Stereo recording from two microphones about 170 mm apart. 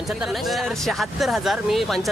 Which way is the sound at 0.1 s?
Centre (ahead or behind).